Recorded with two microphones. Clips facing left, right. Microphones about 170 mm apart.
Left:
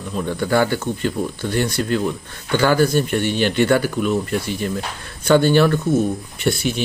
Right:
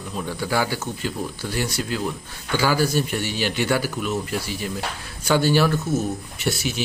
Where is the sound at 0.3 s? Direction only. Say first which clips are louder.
Left 6 dB; 5° right (ahead or behind).